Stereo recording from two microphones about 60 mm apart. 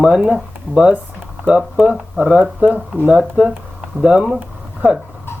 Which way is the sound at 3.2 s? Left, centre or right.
Centre.